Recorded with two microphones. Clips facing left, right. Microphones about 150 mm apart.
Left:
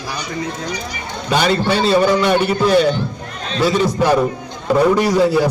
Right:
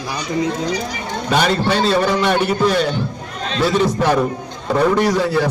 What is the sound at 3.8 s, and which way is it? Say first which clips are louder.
A man's voice: left 1 dB; 5° left (ahead or behind).